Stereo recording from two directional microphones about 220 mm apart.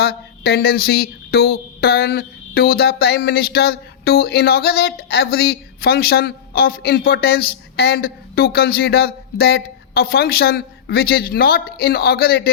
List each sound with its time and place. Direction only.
0.0 s speech: 45° left (ahead or behind)